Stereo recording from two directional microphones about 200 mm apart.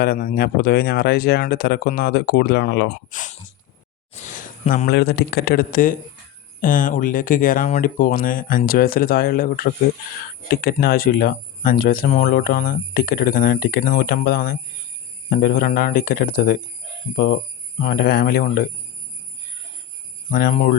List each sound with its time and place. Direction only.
0.0 s speech: 50° left (ahead or behind)
3.1 s speech: 40° left (ahead or behind)
4.1 s a sound: 40° left (ahead or behind)
4.9 s speech: 55° left (ahead or behind)
17.7 s speech: 45° left (ahead or behind)
20.3 s speech: 45° left (ahead or behind)